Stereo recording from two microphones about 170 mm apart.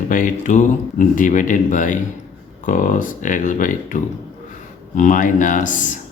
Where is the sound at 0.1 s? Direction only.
50° left (ahead or behind).